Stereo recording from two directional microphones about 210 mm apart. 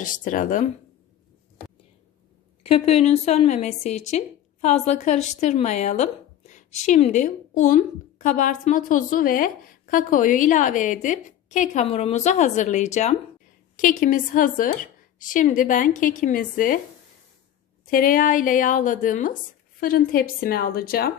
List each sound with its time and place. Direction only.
0.0 s a woman's voice: 40° left (ahead or behind)
2.6 s a woman's voice: 30° left (ahead or behind)
17.8 s a woman's voice: 40° left (ahead or behind)